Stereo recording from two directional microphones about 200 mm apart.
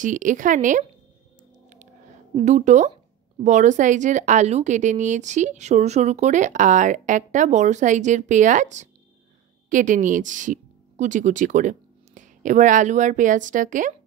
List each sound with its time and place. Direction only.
0.0 s speech: 40° right (ahead or behind)
2.3 s speech: 35° right (ahead or behind)